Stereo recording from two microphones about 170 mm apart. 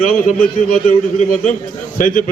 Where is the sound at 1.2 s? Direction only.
50° left (ahead or behind).